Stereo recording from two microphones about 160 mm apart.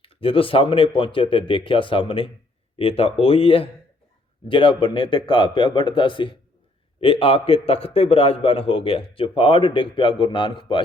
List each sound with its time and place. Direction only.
0.0 s a man's voice: 35° left (ahead or behind)